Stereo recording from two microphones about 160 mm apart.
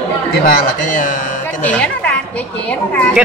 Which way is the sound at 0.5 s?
55° left (ahead or behind).